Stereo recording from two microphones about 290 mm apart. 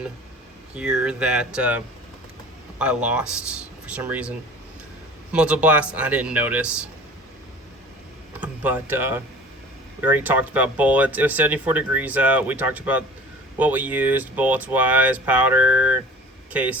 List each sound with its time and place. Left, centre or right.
0.8 s speech: centre
8.4 s speech: centre